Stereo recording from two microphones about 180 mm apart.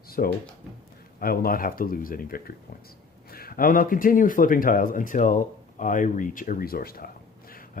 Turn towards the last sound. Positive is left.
turn(degrees=55)  # may be behind; listen again after turning